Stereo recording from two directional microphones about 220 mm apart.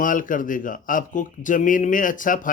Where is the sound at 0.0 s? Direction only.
35° left (ahead or behind).